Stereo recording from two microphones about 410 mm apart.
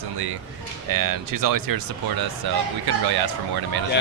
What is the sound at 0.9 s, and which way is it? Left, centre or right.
Speech, right.